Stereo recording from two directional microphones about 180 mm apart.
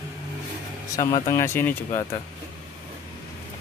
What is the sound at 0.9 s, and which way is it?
Speech, 15° left (ahead or behind).